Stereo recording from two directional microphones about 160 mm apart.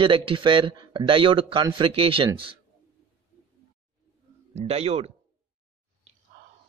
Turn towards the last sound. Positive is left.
turn(degrees=-40)  # may be behind; listen again after turning